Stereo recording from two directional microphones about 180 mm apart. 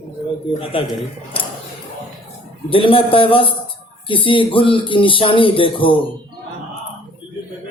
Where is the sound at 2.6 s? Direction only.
30° left (ahead or behind).